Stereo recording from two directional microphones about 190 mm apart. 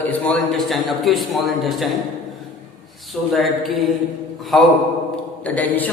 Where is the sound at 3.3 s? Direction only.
Centre (ahead or behind).